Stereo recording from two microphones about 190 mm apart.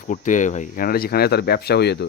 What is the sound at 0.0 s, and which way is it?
Speech, 40° left (ahead or behind).